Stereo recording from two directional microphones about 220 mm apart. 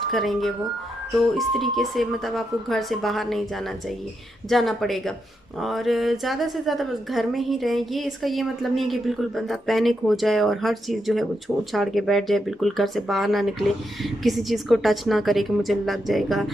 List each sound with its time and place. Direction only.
0.1 s a woman's voice: centre (ahead or behind)